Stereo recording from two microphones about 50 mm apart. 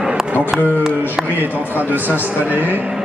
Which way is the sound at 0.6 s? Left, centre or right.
Left.